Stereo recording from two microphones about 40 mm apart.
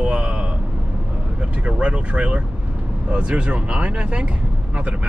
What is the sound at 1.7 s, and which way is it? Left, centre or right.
Speech, right.